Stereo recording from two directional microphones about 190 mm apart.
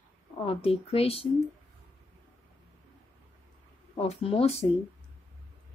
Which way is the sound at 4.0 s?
30° left (ahead or behind).